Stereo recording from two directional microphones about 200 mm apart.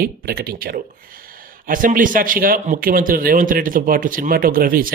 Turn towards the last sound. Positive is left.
turn(degrees=-45)  # may be behind; listen again after turning